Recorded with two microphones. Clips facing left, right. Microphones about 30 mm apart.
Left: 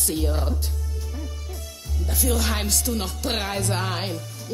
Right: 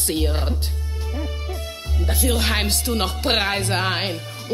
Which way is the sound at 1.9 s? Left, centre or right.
Right.